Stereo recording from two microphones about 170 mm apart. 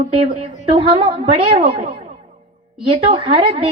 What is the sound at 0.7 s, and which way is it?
A woman's voice, 35° right (ahead or behind).